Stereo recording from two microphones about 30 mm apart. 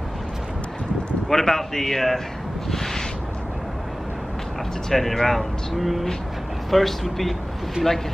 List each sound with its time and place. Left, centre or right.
1.3 s speech: centre
2.7 s a sound: centre
4.8 s speech: centre
7.8 s speech: right